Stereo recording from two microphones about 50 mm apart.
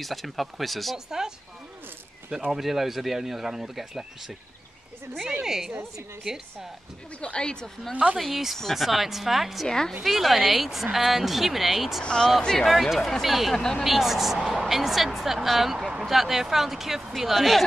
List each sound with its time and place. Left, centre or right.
0.0 s a woman's voice: centre
0.9 s speech: centre
2.5 s a woman's voice: centre
5.4 s speech: centre
7.2 s speech: left
7.9 s speech: right
8.2 s a woman's voice: centre
9.7 s speech: centre
10.0 s a woman's voice: centre
12.0 s a woman's voice: centre
13.6 s speech: centre
13.8 s a woman's voice: centre